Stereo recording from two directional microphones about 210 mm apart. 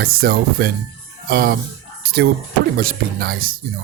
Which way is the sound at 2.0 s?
45° right (ahead or behind).